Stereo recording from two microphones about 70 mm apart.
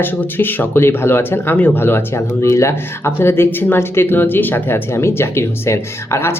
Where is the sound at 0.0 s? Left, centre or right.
Left.